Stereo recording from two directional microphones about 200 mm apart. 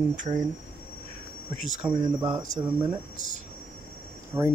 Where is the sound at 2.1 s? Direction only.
20° right (ahead or behind).